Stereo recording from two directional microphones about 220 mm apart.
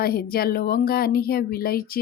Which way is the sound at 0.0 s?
45° left (ahead or behind).